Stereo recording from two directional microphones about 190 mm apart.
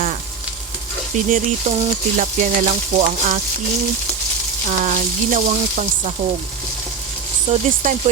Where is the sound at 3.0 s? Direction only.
40° right (ahead or behind).